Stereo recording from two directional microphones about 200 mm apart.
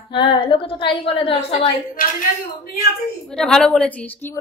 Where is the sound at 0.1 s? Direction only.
25° left (ahead or behind).